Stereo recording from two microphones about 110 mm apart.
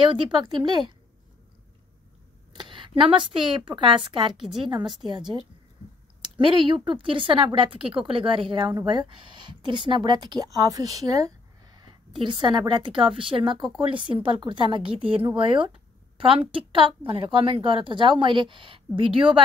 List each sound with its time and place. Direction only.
0.0 s speech: 50° right (ahead or behind)
2.5 s a woman's voice: 50° right (ahead or behind)
6.4 s speech: 50° right (ahead or behind)